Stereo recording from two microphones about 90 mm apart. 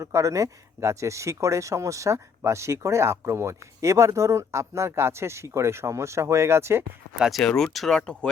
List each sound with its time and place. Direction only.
0.0 s speech: 35° right (ahead or behind)
7.2 s speech: centre (ahead or behind)